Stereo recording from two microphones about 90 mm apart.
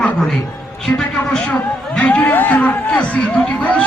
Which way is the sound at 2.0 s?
15° left (ahead or behind).